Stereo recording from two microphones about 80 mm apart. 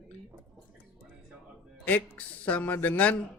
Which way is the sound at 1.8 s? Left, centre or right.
Centre.